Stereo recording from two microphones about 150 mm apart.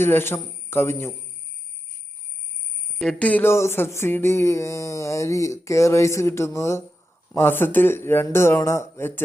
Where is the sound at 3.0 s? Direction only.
5° left (ahead or behind).